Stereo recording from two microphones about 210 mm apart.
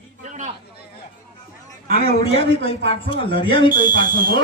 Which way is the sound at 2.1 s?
25° left (ahead or behind).